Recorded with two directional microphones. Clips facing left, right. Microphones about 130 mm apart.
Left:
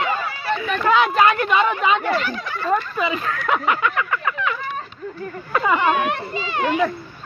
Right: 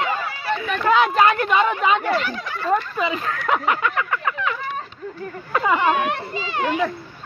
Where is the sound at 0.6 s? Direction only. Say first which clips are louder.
Even; 40° right (ahead or behind).